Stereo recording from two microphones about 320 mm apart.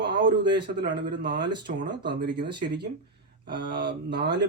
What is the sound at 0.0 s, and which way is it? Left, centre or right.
A man's voice, centre.